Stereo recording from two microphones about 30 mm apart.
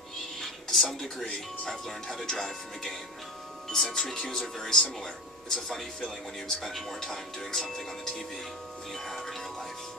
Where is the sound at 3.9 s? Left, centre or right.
Left.